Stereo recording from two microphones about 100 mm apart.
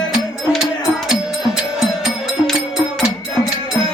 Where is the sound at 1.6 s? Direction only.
5° right (ahead or behind).